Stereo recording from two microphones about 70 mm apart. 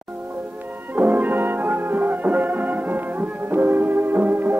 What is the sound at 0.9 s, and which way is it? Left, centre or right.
Music, right.